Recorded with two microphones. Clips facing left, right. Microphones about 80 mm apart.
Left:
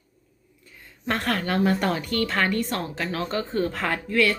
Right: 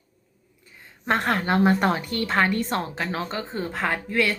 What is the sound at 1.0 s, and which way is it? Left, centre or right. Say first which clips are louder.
A woman's voice: right 3 dB; right.